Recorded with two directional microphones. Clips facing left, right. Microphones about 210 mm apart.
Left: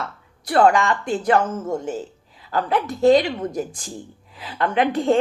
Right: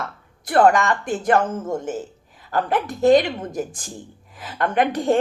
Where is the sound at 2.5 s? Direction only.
50° right (ahead or behind).